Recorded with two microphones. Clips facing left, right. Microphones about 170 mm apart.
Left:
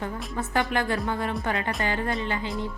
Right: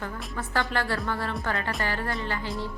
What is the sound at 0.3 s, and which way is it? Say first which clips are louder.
A woman's voice: left 3 dB; 20° left (ahead or behind).